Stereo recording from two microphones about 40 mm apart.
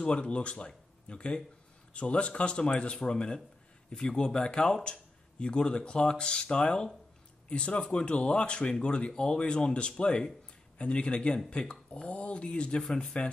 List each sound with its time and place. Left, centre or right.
0.0 s speech: left